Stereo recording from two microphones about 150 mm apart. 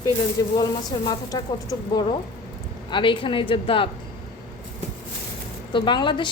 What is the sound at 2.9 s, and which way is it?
Speech, 35° left (ahead or behind).